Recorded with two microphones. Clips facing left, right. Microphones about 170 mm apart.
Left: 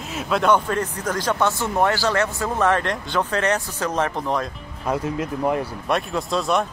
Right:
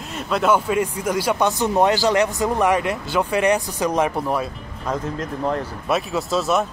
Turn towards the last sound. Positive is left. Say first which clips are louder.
# right 1 dB
turn(degrees=-5)  # may be behind; listen again after turning